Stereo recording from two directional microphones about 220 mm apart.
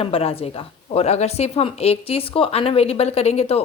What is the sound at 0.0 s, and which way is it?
A woman's voice, 25° left (ahead or behind).